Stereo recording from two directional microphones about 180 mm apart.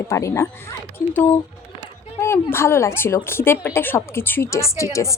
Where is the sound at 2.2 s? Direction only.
15° left (ahead or behind).